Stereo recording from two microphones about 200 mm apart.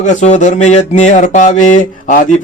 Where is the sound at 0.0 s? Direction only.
35° left (ahead or behind).